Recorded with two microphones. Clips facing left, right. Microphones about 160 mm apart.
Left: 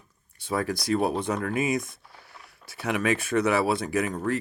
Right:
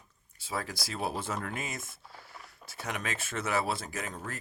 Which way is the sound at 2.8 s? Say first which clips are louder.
Left 11 dB; 65° left (ahead or behind).